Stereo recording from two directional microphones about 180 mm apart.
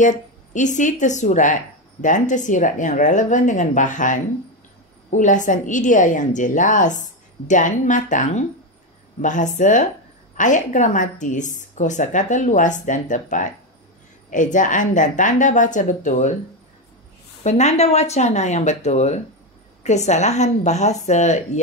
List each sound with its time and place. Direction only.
0.0 s speech: 45° left (ahead or behind)
17.4 s speech: 40° left (ahead or behind)